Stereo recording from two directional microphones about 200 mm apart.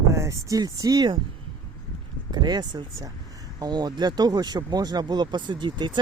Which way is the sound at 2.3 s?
20° right (ahead or behind).